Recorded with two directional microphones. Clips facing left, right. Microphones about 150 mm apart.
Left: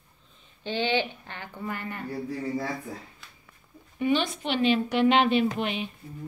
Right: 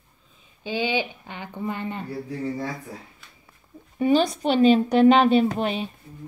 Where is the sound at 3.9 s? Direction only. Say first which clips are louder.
Right 6 dB; 35° right (ahead or behind).